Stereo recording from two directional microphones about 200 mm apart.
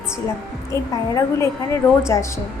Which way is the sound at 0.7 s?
15° left (ahead or behind).